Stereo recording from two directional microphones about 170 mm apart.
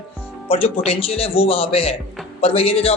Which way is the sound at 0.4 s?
35° left (ahead or behind).